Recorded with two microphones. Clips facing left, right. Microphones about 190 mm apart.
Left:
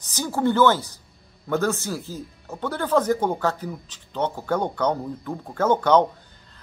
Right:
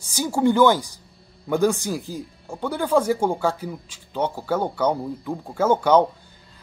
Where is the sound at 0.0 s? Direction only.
10° right (ahead or behind).